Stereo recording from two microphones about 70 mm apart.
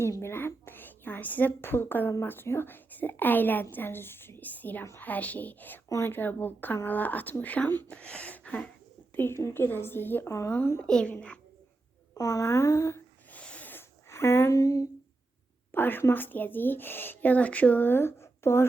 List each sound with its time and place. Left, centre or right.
0.0 s speech: left; by 8.7 s centre
9.1 s a woman's voice: left
10.2 s speech: left
10.6 s a woman's voice: left
10.8 s a woman's voice: centre
12.1 s speech: left
13.3 s sneeze: centre
14.1 s a woman's voice: left
15.7 s speech: left